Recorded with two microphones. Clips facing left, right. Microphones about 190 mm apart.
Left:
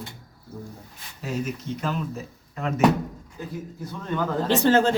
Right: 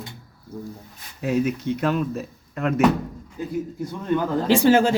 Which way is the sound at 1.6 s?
65° right (ahead or behind).